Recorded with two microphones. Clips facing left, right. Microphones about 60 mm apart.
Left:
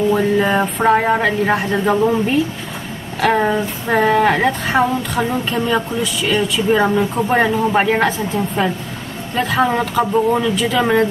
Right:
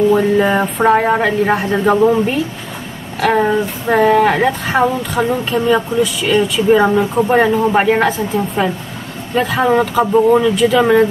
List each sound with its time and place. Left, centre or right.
0.1 s speech: centre